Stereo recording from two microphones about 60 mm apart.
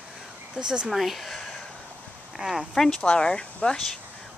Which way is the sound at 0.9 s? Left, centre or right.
Centre.